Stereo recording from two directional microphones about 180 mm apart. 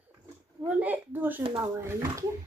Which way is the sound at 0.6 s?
10° right (ahead or behind).